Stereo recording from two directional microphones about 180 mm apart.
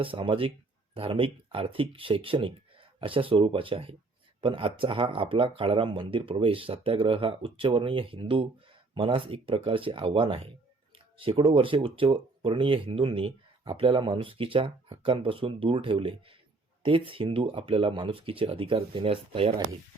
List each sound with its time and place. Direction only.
0.0 s speech: 30° right (ahead or behind)